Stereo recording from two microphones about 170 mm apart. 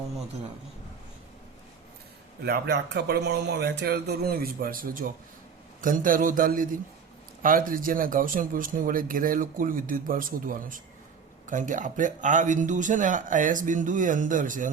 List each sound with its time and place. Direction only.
2.4 s a man's voice: 75° right (ahead or behind); by 14.7 s 50° right (ahead or behind)